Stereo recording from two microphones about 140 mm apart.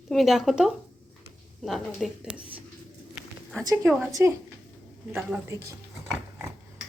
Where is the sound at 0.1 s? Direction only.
Centre (ahead or behind).